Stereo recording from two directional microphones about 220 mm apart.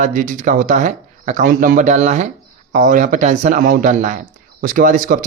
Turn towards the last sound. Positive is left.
turn(degrees=-40)  # may be behind; listen again after turning